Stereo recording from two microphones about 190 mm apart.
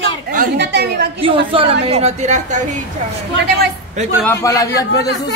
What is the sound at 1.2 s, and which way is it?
A woman's voice, 30° right (ahead or behind).